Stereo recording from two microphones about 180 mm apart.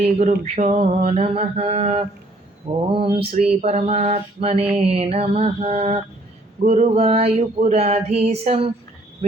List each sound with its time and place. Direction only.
0.0 s mantra: 40° right (ahead or behind)